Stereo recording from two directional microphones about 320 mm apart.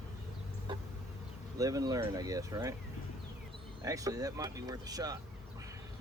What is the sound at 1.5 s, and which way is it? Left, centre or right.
Speech, centre.